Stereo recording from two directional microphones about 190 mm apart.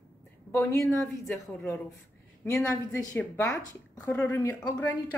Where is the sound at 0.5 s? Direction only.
15° left (ahead or behind).